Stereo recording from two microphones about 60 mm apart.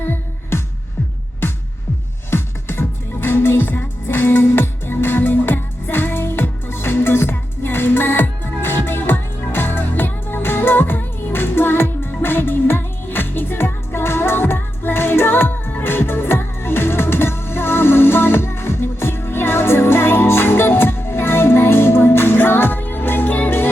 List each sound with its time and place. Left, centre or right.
0.0 s music: left